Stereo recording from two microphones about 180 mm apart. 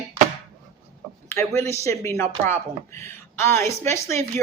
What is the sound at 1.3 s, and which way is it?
A woman's voice, 15° left (ahead or behind).